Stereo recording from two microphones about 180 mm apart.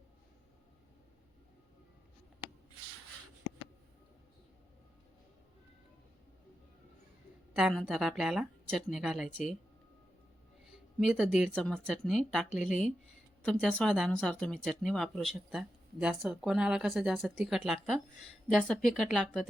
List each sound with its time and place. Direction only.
7.5 s speech: centre (ahead or behind)
10.7 s a sound: 5° right (ahead or behind)
11.5 s speech: 5° left (ahead or behind)
12.5 s a woman's voice: 45° left (ahead or behind)
13.4 s speech: 5° left (ahead or behind)